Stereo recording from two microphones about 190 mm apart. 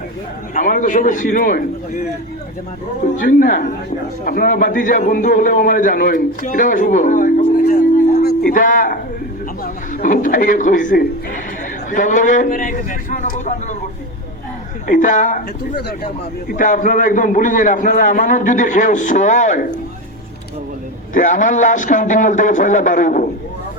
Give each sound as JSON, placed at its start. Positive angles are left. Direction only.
{"t": 0.5, "sound": "a man's voice", "side_deg": 45}
{"t": 8.2, "sound": "a sound", "side_deg": 50}
{"t": 10.0, "sound": "a man's voice", "side_deg": 45}
{"t": 14.8, "sound": "a man's voice", "side_deg": 40}
{"t": 21.1, "sound": "a man's voice", "side_deg": 45}